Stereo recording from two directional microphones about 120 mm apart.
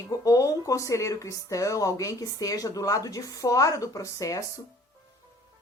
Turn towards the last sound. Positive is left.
turn(degrees=30)  # may be behind; listen again after turning